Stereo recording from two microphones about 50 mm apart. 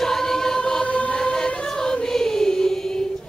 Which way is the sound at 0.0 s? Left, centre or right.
Centre.